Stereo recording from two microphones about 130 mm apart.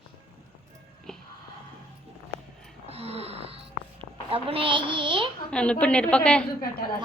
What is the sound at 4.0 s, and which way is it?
A child's voice, 45° right (ahead or behind).